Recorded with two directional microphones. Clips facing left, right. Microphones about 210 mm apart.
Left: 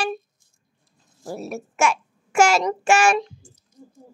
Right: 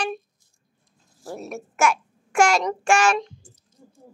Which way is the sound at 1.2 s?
5° left (ahead or behind).